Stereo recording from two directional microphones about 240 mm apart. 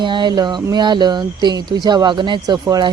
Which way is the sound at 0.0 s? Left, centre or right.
Centre.